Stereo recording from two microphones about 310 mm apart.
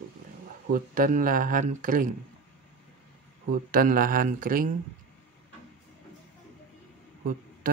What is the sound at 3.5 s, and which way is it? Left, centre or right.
Speech, right.